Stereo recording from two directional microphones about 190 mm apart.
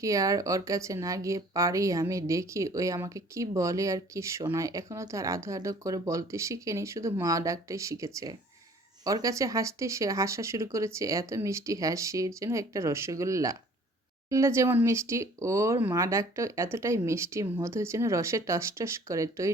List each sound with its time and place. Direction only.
0.0 s speech: 15° right (ahead or behind)